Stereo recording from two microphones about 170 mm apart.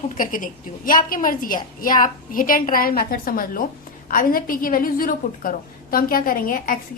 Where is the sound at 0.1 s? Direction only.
55° left (ahead or behind).